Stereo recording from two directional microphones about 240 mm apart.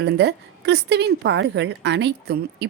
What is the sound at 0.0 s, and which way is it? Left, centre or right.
A woman's voice, right.